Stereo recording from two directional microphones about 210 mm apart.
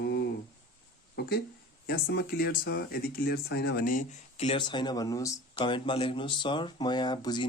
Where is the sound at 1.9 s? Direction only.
45° left (ahead or behind).